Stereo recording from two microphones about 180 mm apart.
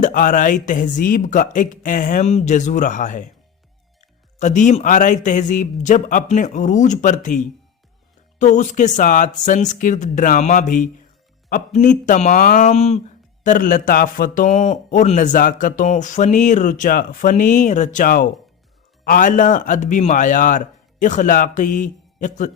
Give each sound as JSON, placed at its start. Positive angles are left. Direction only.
{"t": 0.0, "sound": "a man's voice", "side_deg": 50}
{"t": 4.4, "sound": "a man's voice", "side_deg": 40}
{"t": 13.4, "sound": "a man's voice", "side_deg": 45}